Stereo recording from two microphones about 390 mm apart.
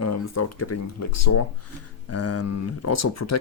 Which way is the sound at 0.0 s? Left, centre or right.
Left.